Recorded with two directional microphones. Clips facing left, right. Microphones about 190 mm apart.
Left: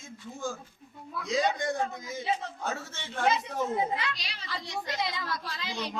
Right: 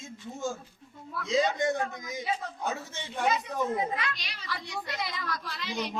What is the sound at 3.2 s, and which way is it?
A woman's voice, 25° left (ahead or behind).